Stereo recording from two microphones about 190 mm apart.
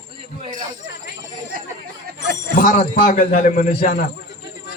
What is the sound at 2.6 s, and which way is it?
A man's voice, 45° left (ahead or behind).